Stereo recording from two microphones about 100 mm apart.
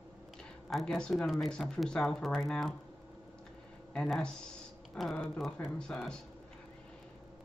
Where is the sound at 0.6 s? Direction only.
5° left (ahead or behind).